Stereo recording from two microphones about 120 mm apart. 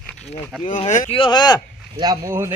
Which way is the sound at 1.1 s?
45° left (ahead or behind).